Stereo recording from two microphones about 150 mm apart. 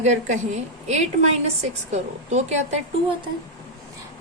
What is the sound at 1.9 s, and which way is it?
Speech, 50° right (ahead or behind).